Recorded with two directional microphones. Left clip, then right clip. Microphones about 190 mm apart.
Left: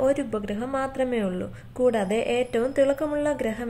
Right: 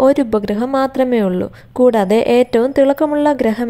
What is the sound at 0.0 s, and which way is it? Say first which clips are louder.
A woman's voice: right 11 dB; 40° right (ahead or behind).